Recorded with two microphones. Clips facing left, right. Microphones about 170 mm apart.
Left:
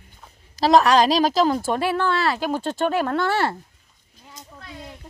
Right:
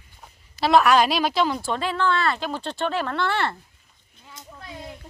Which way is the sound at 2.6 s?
45° left (ahead or behind).